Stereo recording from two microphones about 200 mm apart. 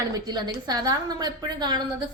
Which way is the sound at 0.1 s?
20° right (ahead or behind).